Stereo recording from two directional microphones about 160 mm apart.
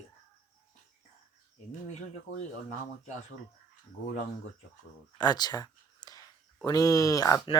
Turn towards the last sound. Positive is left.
turn(degrees=20)  # may be behind; listen again after turning